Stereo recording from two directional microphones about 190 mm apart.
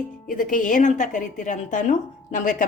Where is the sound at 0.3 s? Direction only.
45° left (ahead or behind).